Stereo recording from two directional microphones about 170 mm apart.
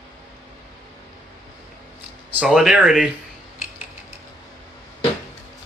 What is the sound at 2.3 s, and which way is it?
Speech, 5° right (ahead or behind).